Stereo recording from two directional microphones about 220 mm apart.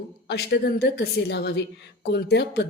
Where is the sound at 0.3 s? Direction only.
50° left (ahead or behind).